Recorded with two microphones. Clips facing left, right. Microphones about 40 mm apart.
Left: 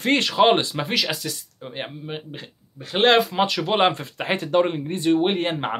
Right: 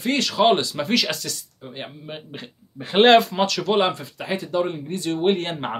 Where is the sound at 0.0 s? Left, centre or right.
Left.